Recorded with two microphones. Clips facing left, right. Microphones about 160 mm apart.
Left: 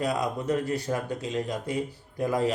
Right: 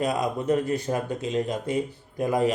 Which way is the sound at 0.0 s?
20° right (ahead or behind).